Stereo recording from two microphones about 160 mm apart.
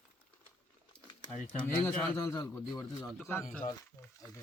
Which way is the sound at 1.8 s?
15° left (ahead or behind).